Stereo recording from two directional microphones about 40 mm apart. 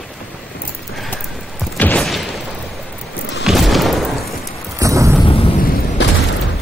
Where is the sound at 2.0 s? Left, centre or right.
Centre.